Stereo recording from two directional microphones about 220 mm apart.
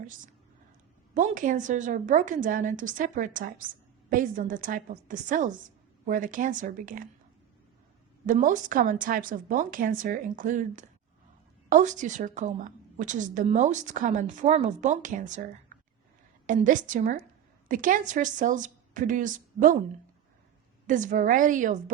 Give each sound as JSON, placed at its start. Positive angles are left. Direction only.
{"t": 1.1, "sound": "a woman's voice", "side_deg": -35}
{"t": 8.3, "sound": "a woman's voice", "side_deg": -35}
{"t": 16.5, "sound": "a woman's voice", "side_deg": -35}
{"t": 20.8, "sound": "a woman's voice", "side_deg": -35}